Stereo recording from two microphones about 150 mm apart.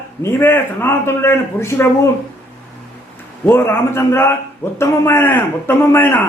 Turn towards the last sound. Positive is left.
turn(degrees=15)  # may be behind; listen again after turning